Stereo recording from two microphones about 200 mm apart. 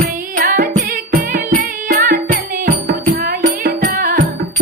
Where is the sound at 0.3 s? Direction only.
45° right (ahead or behind).